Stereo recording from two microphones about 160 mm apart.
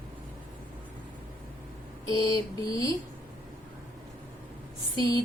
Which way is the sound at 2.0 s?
25° left (ahead or behind).